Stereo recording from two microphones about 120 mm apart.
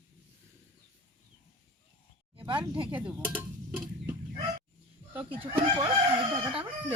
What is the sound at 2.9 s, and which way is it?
Stir, 15° right (ahead or behind).